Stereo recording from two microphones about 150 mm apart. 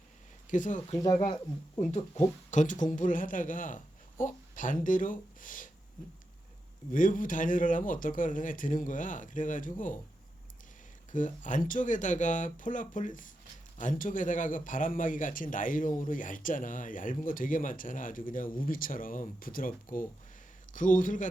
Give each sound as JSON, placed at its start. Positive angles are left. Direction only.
{"t": 0.5, "sound": "a man's voice", "side_deg": 60}
{"t": 1.0, "sound": "speech", "side_deg": 30}
{"t": 1.8, "sound": "a man's voice", "side_deg": 50}
{"t": 6.9, "sound": "a man's voice", "side_deg": 65}
{"t": 11.1, "sound": "a man's voice", "side_deg": 55}